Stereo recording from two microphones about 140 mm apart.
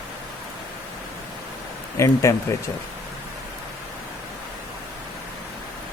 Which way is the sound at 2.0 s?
20° left (ahead or behind).